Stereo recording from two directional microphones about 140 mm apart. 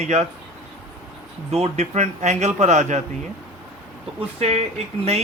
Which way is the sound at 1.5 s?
50° right (ahead or behind).